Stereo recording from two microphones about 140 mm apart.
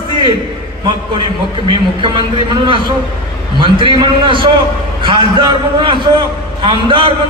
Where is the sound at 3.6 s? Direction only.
35° right (ahead or behind).